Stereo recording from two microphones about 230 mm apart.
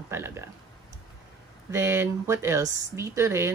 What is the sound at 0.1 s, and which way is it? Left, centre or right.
Speech, centre.